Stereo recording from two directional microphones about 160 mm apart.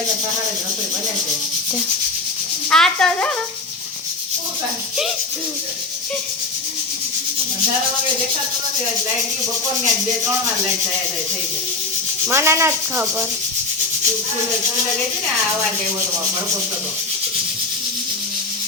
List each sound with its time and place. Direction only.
2.6 s speech: 5° left (ahead or behind)
12.3 s sanding: 15° right (ahead or behind)